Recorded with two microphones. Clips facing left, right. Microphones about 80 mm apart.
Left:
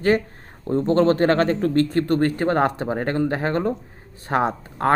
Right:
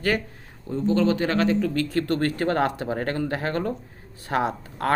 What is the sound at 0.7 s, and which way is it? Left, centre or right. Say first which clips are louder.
Speech: left 4 dB; left.